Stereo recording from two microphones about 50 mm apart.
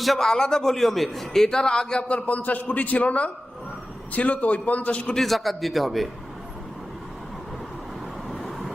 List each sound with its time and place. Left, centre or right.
0.0 s a man's voice: centre; by 5.1 s left
5.1 s a man's voice: centre
8.3 s vehicle: centre